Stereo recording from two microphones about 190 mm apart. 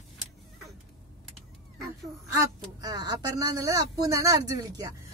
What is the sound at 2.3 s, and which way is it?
Speech, 20° right (ahead or behind).